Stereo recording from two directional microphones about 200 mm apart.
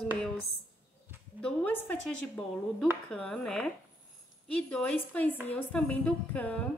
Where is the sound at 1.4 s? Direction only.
5° left (ahead or behind).